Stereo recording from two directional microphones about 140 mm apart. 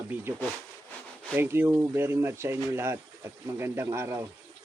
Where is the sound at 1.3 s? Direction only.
15° right (ahead or behind).